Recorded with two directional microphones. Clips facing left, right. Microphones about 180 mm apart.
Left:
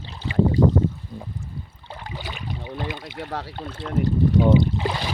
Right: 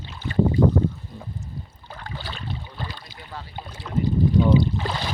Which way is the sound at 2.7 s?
20° left (ahead or behind).